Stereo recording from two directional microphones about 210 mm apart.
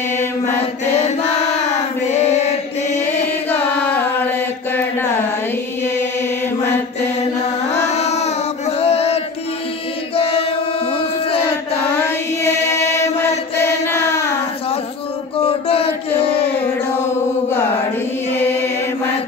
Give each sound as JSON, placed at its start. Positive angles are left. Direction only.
{"t": 2.1, "sound": "chant", "side_deg": 30}
{"t": 3.4, "sound": "chant", "side_deg": 10}
{"t": 7.9, "sound": "child singing", "side_deg": 30}
{"t": 8.8, "sound": "music", "side_deg": 30}
{"t": 10.1, "sound": "chant", "side_deg": 25}
{"t": 12.0, "sound": "chant", "side_deg": 10}
{"t": 15.4, "sound": "a sound", "side_deg": 25}